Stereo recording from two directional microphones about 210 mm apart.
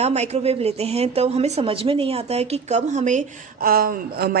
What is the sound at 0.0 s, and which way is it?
A woman's voice, 30° right (ahead or behind).